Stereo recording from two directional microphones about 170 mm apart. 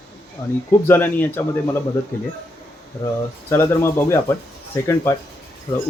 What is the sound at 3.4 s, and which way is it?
Speech, 15° left (ahead or behind).